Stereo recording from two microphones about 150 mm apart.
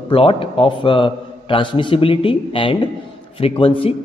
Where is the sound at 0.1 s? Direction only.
40° left (ahead or behind).